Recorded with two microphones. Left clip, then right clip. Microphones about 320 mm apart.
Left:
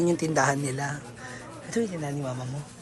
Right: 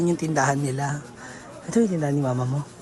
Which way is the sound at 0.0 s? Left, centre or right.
Centre.